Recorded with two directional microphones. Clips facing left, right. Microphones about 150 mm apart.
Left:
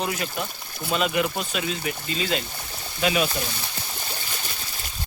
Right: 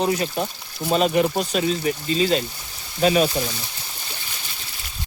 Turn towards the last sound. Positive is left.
turn(degrees=-40)  # may be behind; listen again after turning